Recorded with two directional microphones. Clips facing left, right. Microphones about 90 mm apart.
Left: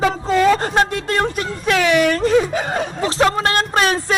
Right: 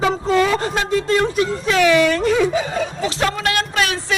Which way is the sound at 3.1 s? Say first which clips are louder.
Left 7 dB; 35° left (ahead or behind).